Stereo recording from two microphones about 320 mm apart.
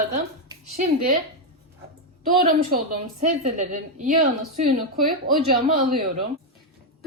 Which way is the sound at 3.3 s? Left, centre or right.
Right.